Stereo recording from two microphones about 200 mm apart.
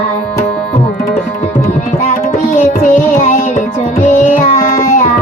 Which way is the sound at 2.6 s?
40° left (ahead or behind).